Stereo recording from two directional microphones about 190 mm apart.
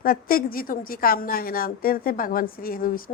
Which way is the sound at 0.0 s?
50° left (ahead or behind).